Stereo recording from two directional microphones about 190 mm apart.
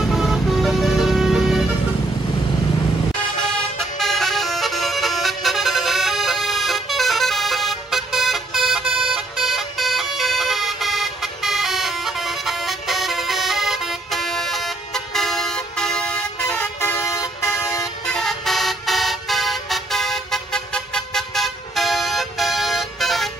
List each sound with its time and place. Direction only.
0.0 s vehicle: centre (ahead or behind)
4.0 s music: centre (ahead or behind)
15.1 s vehicle: centre (ahead or behind)
16.8 s vehicle: 15° left (ahead or behind)
18.0 s vehicle: 5° left (ahead or behind)